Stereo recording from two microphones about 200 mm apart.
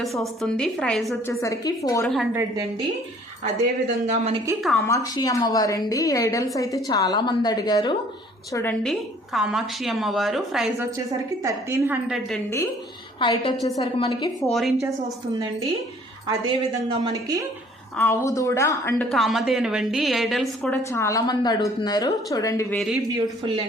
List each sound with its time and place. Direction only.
0.0 s a woman's voice: centre (ahead or behind)
1.3 s a woman's voice: 15° left (ahead or behind)
3.4 s speech: 35° right (ahead or behind)
4.9 s a woman's voice: 15° left (ahead or behind)
8.8 s a woman's voice: centre (ahead or behind)
11.4 s a woman's voice: 15° right (ahead or behind)
12.0 s a woman's voice: centre (ahead or behind)
13.1 s a woman's voice: 25° left (ahead or behind)
16.2 s a woman's voice: 25° right (ahead or behind)
17.9 s a woman's voice: 10° left (ahead or behind)
19.1 s a woman's voice: centre (ahead or behind); by 22.8 s 15° left (ahead or behind)